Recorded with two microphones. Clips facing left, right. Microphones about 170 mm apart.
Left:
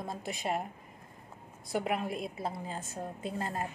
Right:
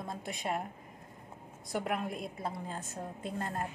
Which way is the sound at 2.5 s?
5° left (ahead or behind).